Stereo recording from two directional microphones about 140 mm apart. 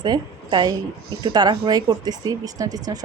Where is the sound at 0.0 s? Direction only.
30° right (ahead or behind).